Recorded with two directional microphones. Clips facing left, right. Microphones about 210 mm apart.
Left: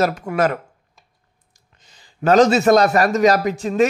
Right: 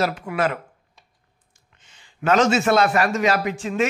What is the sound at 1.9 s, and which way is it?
A man's voice, 35° left (ahead or behind).